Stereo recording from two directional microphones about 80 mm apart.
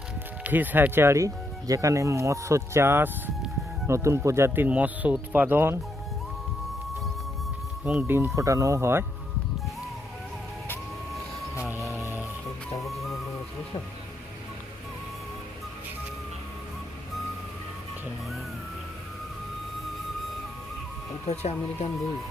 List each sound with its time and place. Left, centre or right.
0.4 s speech: right
7.9 s speech: right
8.4 s speech: right
12.8 s music: centre